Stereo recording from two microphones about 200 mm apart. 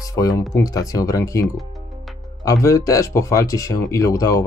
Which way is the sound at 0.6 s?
15° left (ahead or behind).